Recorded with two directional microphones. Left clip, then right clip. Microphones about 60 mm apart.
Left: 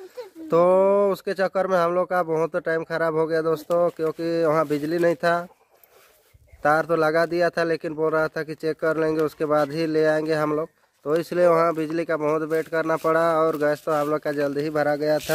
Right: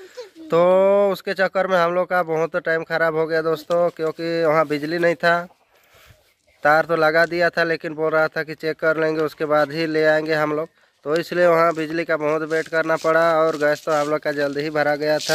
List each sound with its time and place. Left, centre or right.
0.5 s speech: centre
6.6 s speech: centre
7.9 s speech: centre
8.2 s speech: centre
13.8 s speech: centre
14.1 s speech: centre